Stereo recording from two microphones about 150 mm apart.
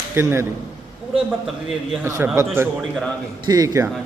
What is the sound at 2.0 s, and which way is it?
A man's voice, 20° right (ahead or behind).